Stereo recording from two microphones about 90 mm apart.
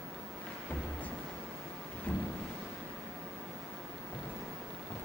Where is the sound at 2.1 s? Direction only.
15° left (ahead or behind).